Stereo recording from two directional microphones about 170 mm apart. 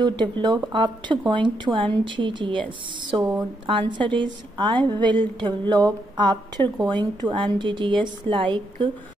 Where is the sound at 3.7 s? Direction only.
30° right (ahead or behind).